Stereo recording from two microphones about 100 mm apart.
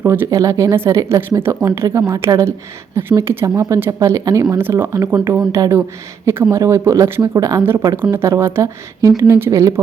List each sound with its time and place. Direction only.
0.0 s speech: 20° right (ahead or behind)
0.3 s speech: 30° right (ahead or behind)
4.9 s speech: 35° right (ahead or behind)
7.6 s speech: 25° right (ahead or behind)